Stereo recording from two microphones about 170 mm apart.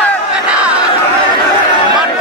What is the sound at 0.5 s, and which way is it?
Chatter, 5° right (ahead or behind).